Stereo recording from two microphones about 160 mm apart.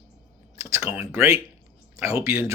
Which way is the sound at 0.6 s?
20° right (ahead or behind).